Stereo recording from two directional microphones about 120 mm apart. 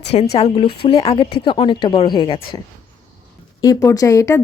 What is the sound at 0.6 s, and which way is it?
Speech, 45° left (ahead or behind).